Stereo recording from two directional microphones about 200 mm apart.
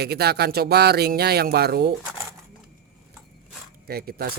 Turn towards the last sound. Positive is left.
turn(degrees=-50)  # may be behind; listen again after turning